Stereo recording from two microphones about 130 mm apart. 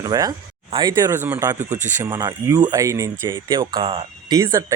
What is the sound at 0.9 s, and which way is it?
Speech, 20° right (ahead or behind).